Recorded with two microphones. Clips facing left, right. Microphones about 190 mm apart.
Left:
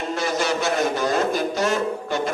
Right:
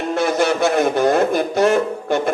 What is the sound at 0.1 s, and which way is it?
A man's voice, 55° right (ahead or behind).